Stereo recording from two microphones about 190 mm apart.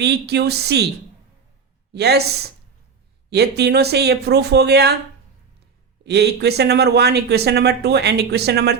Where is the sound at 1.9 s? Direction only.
60° right (ahead or behind).